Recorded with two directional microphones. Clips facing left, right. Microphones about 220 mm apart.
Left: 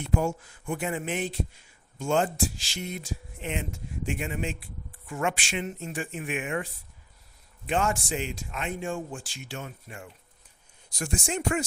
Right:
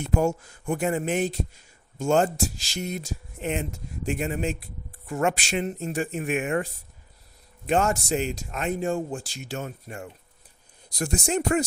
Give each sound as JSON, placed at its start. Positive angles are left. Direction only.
{"t": 0.0, "sound": "speech", "side_deg": -45}
{"t": 7.7, "sound": "speech", "side_deg": -40}